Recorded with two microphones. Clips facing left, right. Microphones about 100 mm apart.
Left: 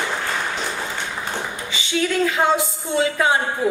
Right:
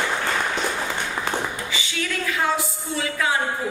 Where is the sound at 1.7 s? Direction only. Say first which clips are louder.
Left 6 dB; 25° left (ahead or behind).